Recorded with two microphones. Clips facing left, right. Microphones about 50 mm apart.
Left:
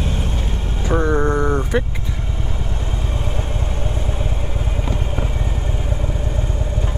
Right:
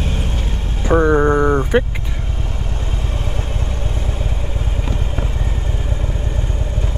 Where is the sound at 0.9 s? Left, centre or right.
Right.